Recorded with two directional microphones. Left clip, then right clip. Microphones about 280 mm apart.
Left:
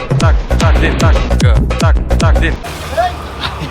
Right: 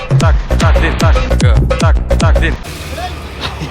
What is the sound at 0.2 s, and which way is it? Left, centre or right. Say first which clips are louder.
Music: right 1 dB; centre.